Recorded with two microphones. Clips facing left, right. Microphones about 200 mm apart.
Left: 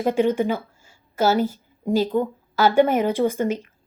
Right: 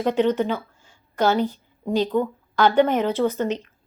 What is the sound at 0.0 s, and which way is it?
A woman's voice, 10° left (ahead or behind).